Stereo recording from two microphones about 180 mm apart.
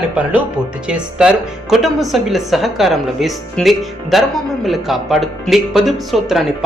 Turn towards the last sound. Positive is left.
turn(degrees=0)  # may be behind; listen again after turning